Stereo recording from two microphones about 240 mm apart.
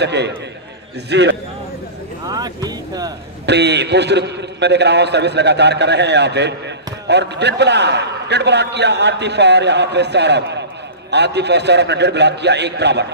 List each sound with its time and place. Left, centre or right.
0.0 s a man's voice: right
2.2 s speech: centre
3.4 s a man's voice: right